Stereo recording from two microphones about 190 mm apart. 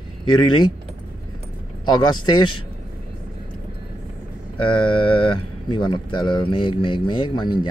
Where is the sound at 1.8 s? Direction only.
25° left (ahead or behind).